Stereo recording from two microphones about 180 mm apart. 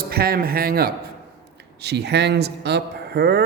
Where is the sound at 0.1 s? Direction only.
60° right (ahead or behind).